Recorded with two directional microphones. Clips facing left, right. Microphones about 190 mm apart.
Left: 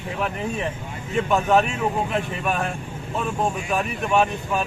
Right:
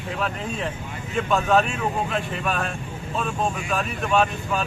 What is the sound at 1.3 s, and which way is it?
Speech, 15° left (ahead or behind).